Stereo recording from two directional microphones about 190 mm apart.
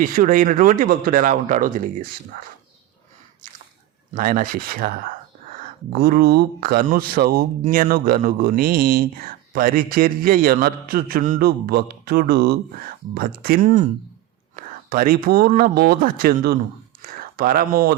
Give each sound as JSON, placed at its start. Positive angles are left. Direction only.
{"t": 0.0, "sound": "speech", "side_deg": -45}
{"t": 4.1, "sound": "speech", "side_deg": -45}
{"t": 17.0, "sound": "a sound", "side_deg": -50}